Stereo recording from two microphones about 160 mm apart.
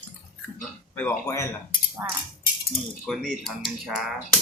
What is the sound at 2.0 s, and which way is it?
Speech, 15° right (ahead or behind).